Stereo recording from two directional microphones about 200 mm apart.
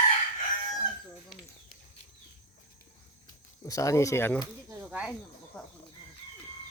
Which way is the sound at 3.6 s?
15° left (ahead or behind).